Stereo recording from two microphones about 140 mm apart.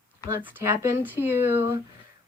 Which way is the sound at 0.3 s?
20° right (ahead or behind).